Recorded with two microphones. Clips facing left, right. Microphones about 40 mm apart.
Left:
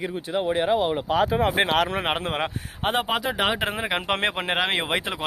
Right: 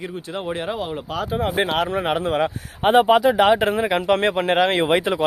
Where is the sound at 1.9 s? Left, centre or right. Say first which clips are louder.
Right 5 dB; left.